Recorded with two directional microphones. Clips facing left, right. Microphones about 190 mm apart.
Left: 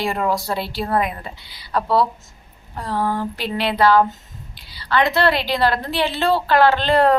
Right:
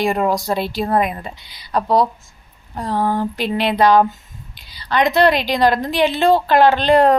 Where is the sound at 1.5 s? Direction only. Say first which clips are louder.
Right 2 dB; 15° right (ahead or behind).